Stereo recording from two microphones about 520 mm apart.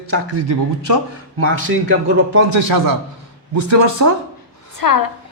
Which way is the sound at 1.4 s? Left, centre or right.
Right.